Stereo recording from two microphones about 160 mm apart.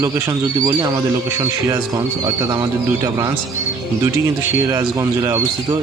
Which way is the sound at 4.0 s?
15° right (ahead or behind).